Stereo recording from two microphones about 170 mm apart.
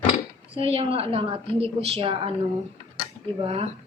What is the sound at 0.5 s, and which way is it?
A woman's voice, 35° right (ahead or behind).